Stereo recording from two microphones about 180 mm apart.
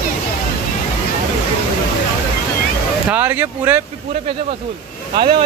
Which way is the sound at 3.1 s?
10° right (ahead or behind).